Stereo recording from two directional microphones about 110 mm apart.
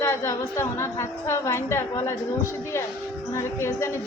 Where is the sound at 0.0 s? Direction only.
25° left (ahead or behind).